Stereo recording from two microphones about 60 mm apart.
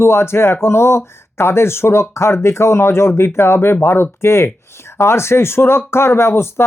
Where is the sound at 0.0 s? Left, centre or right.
Left.